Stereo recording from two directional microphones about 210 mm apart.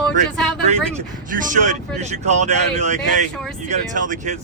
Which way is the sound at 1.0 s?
40° right (ahead or behind).